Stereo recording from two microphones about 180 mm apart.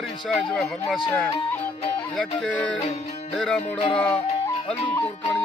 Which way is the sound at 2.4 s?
5° left (ahead or behind).